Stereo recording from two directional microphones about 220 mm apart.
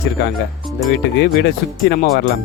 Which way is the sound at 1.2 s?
50° left (ahead or behind).